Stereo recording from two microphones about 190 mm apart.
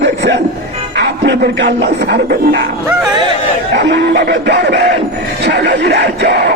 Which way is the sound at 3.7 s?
65° right (ahead or behind).